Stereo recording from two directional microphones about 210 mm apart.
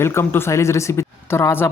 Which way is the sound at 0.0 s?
10° left (ahead or behind).